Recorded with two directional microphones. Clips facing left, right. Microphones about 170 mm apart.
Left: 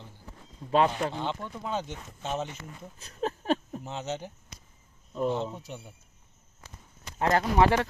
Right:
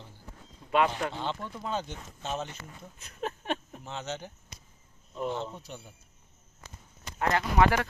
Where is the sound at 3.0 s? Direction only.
35° left (ahead or behind).